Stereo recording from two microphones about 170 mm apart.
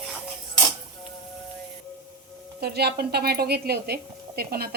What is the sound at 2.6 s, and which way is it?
A woman's voice, 70° right (ahead or behind).